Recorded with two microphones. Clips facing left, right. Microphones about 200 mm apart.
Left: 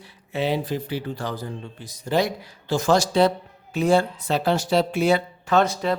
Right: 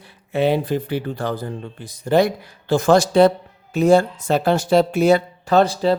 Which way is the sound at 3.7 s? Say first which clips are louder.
Right 5 dB; 45° right (ahead or behind).